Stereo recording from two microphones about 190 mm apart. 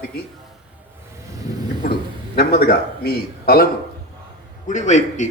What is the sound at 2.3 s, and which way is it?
A man's voice, 55° left (ahead or behind).